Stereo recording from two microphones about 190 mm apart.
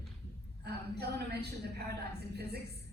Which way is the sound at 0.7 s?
60° right (ahead or behind).